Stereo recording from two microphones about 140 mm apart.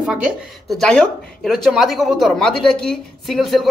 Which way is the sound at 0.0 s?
5° right (ahead or behind).